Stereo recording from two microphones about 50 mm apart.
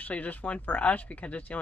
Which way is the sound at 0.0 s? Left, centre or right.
Left.